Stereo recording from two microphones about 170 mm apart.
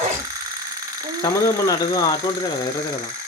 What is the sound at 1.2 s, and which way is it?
Speech, 20° left (ahead or behind).